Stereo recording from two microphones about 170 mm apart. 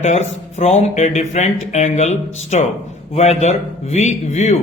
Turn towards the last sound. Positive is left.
turn(degrees=40)  # may be behind; listen again after turning